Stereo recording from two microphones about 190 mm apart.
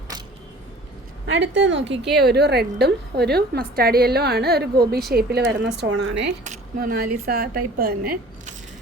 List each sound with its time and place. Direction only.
1.3 s a woman's voice: 70° right (ahead or behind); by 5.5 s 55° right (ahead or behind)
5.8 s speech: 70° right (ahead or behind)
6.4 s a woman's voice: 45° right (ahead or behind)